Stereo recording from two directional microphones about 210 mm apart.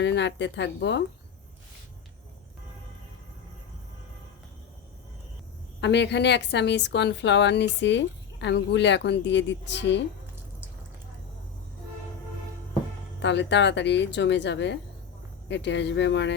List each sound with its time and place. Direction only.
0.0 s a woman's voice: 55° left (ahead or behind)
5.8 s a woman's voice: 55° left (ahead or behind)
13.1 s a woman's voice: 55° left (ahead or behind)